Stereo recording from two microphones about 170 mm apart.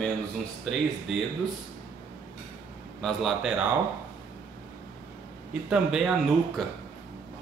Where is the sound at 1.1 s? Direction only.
Centre (ahead or behind).